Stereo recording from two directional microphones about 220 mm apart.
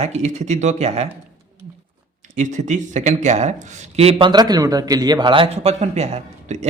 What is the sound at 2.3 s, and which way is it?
Speech, 35° right (ahead or behind).